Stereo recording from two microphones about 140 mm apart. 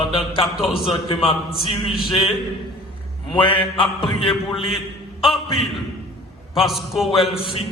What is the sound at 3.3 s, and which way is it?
Mantra, 40° left (ahead or behind).